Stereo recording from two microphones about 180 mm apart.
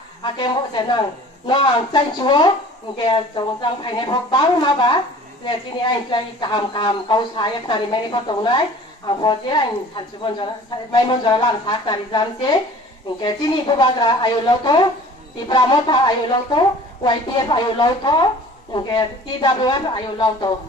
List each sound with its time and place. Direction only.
0.2 s a woman's voice: 25° left (ahead or behind)